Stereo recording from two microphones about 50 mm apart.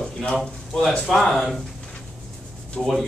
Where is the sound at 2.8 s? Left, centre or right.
Centre.